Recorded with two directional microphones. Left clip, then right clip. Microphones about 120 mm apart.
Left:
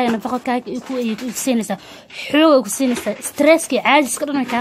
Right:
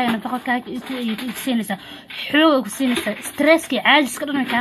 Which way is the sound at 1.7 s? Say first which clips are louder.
Left 1 dB; 45° left (ahead or behind).